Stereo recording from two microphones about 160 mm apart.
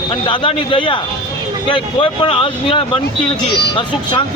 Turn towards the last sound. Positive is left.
turn(degrees=30)  # may be behind; listen again after turning